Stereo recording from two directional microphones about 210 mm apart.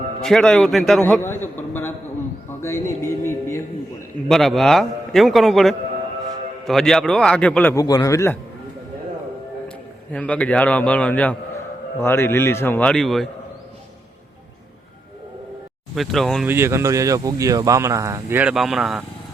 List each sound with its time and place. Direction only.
0.2 s a man's voice: centre (ahead or behind)
4.3 s a man's voice: centre (ahead or behind)
9.6 s a man's voice: 5° left (ahead or behind)
16.0 s a man's voice: centre (ahead or behind)
16.5 s speech: 10° right (ahead or behind)